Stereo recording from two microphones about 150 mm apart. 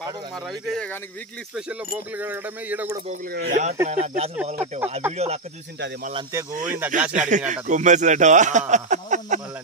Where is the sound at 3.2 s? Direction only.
80° right.